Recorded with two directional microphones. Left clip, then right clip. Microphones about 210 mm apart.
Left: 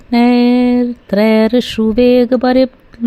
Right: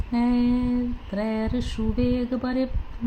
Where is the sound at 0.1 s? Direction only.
50° left (ahead or behind).